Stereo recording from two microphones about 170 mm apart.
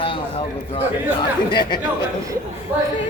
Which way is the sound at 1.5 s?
25° left (ahead or behind).